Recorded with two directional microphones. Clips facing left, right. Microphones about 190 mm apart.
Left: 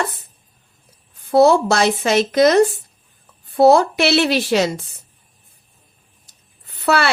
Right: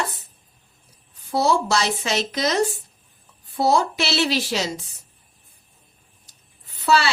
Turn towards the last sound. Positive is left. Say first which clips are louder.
# left 2 dB
turn(degrees=60)  # may be behind; listen again after turning